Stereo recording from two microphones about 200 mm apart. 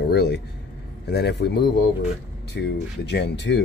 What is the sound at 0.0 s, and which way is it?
Speech, 55° left (ahead or behind).